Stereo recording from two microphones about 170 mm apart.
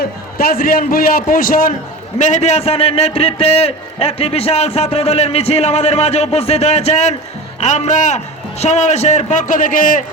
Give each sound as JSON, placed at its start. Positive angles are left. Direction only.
{"t": 0.0, "sound": "a man's voice", "side_deg": 60}